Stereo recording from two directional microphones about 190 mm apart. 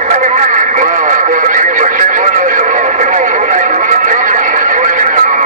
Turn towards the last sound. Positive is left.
turn(degrees=-40)  # may be behind; listen again after turning